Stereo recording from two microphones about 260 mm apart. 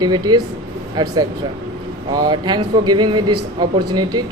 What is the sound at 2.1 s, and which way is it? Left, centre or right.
Speech, centre.